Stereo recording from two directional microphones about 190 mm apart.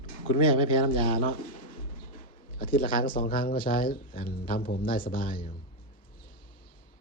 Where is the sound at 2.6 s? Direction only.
50° left (ahead or behind).